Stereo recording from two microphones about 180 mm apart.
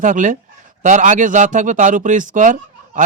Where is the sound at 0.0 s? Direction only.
45° right (ahead or behind).